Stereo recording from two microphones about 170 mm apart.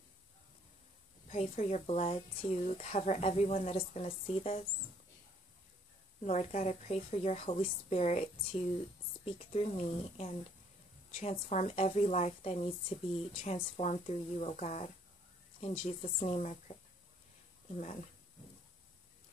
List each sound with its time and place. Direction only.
1.3 s a woman's voice: 40° left (ahead or behind)
6.2 s a woman's voice: 45° left (ahead or behind)
17.7 s speech: 45° left (ahead or behind)